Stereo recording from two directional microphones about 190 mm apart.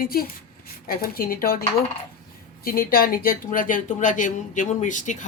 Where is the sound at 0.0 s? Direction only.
50° left (ahead or behind).